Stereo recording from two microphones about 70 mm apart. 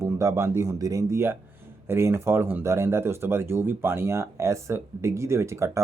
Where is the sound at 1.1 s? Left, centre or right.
Right.